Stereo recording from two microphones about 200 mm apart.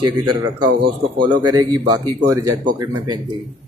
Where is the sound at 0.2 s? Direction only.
20° right (ahead or behind).